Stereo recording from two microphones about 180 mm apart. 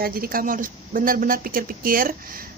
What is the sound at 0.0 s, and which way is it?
A woman's voice, 55° right (ahead or behind).